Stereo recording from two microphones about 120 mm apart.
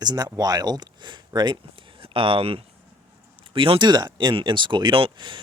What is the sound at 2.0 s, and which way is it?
Speech, 50° right (ahead or behind).